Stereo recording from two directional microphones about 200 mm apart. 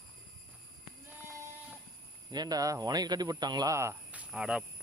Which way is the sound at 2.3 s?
20° right (ahead or behind).